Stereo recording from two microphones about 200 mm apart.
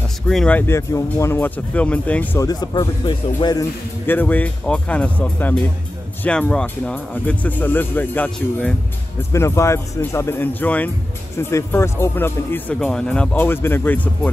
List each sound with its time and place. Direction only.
0.3 s speech: 5° left (ahead or behind)
2.4 s speech: 20° left (ahead or behind)
4.1 s speech: 10° left (ahead or behind)